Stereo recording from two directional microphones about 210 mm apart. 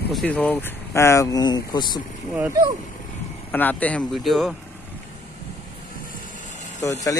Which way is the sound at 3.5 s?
10° left (ahead or behind).